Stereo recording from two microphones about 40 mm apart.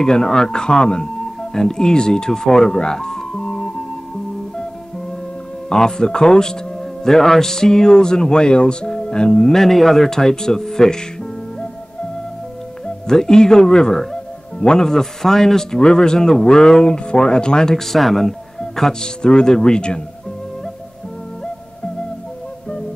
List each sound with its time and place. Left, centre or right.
0.0 s speech: centre
5.7 s speech: centre
6.8 s speech: centre
12.8 s speech: centre